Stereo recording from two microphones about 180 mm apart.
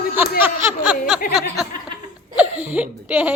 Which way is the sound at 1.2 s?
50° left (ahead or behind).